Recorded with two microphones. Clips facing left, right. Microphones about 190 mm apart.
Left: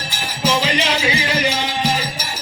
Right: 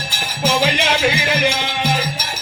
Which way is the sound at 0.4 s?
50° right (ahead or behind).